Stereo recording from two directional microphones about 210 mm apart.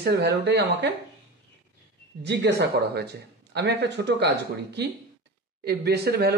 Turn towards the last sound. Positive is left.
turn(degrees=-50)  # may be behind; listen again after turning